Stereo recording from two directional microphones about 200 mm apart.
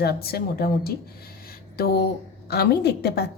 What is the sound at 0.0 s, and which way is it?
A woman's voice, 50° left (ahead or behind).